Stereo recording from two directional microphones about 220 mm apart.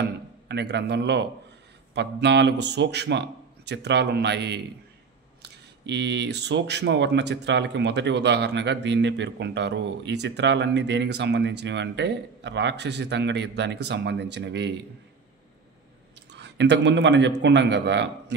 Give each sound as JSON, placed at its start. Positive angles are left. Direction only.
{"t": 0.0, "sound": "a sound", "side_deg": -50}
{"t": 2.0, "sound": "speech", "side_deg": -50}
{"t": 16.3, "sound": "a man's voice", "side_deg": -50}